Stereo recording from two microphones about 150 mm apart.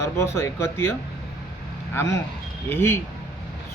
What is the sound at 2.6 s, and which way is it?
Speech, 15° left (ahead or behind).